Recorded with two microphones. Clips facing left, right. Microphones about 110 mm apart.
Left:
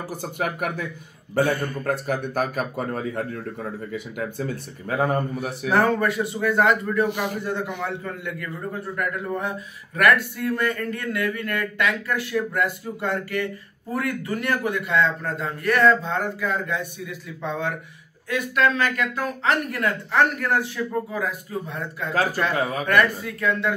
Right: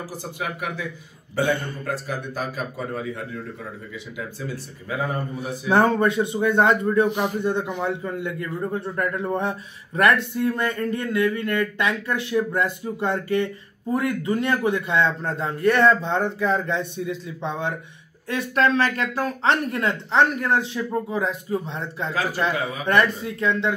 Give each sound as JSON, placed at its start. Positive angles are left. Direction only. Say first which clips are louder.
{"t": 0.2, "sound": "a man's voice", "louder": "left 4 dB", "side_deg": 55}
{"t": 1.9, "sound": "a man's voice", "louder": "left 4 dB", "side_deg": 55}
{"t": 5.7, "sound": "speech", "louder": "right 2 dB", "side_deg": -25}
{"t": 18.3, "sound": "speech", "louder": "right 1 dB", "side_deg": -30}